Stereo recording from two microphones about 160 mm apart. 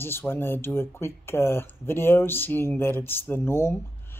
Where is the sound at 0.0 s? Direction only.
15° left (ahead or behind).